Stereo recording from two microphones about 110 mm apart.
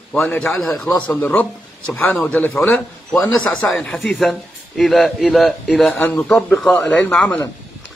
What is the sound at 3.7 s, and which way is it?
A man's voice, 5° left (ahead or behind).